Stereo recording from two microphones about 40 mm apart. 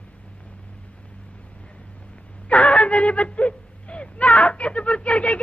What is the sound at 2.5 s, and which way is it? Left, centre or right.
Whimper, left.